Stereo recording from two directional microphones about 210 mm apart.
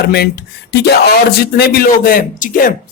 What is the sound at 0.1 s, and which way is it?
Speech, 50° left (ahead or behind).